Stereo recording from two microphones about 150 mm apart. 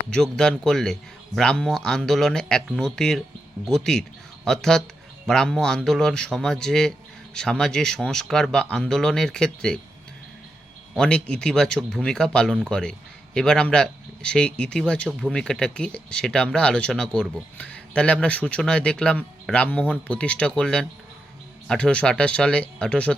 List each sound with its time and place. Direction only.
0.1 s speech: 5° left (ahead or behind)
10.9 s speech: 5° left (ahead or behind)